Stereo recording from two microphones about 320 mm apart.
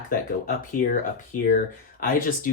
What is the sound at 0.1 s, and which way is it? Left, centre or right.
Speech, left.